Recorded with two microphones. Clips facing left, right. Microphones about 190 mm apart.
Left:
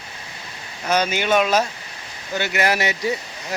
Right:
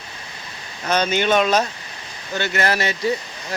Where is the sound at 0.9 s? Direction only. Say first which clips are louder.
Right 1 dB; 10° left (ahead or behind).